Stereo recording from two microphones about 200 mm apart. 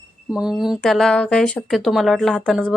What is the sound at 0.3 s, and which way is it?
Speech, 5° right (ahead or behind).